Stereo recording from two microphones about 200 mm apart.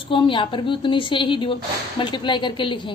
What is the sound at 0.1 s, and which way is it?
A woman's voice, 25° left (ahead or behind).